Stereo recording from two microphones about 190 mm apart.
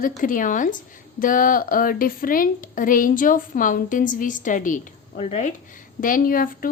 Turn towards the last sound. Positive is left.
turn(degrees=50)  # may be behind; listen again after turning